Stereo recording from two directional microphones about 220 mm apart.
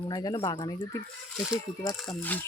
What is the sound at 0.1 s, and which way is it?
Speech, 20° left (ahead or behind).